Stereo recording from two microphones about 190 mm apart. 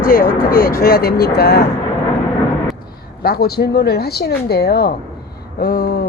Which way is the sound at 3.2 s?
55° left (ahead or behind).